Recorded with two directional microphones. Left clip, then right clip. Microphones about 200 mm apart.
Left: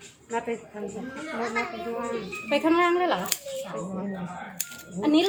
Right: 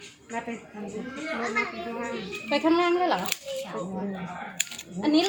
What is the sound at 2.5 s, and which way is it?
Speech, 15° left (ahead or behind).